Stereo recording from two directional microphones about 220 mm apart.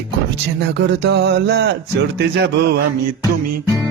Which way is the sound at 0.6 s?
50° right (ahead or behind).